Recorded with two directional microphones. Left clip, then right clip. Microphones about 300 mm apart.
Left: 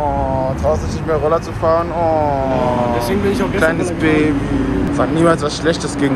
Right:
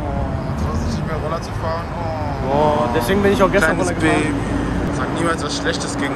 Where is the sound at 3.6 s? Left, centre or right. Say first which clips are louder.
Left 2 dB; centre.